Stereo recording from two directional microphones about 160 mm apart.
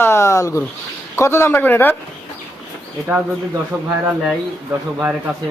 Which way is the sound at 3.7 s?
20° right (ahead or behind).